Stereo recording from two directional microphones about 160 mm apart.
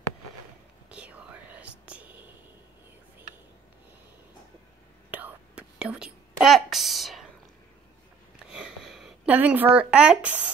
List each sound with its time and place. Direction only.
0.8 s whispering: 5° right (ahead or behind)
5.1 s whispering: 10° right (ahead or behind)
8.4 s a sound: 5° right (ahead or behind)